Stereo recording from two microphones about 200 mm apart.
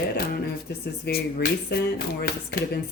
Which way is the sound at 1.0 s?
50° left (ahead or behind).